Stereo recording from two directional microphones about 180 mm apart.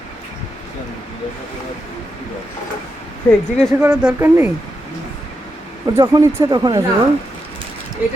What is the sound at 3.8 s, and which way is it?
Speech, 10° right (ahead or behind).